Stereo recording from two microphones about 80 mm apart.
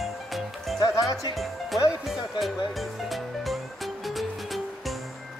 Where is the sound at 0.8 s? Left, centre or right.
Left.